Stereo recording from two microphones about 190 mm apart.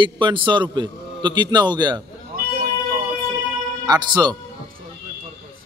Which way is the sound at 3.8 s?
20° right (ahead or behind).